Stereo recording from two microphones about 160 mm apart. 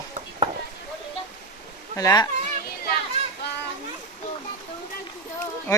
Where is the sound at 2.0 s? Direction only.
20° left (ahead or behind).